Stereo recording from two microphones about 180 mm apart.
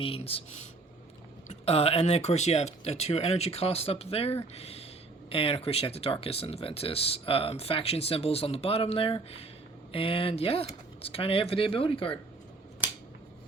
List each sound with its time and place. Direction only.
0.0 s speech: 30° left (ahead or behind)